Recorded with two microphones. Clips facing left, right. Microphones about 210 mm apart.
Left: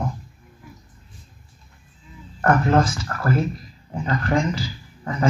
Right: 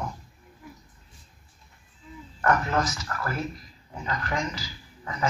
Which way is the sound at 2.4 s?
50° left (ahead or behind).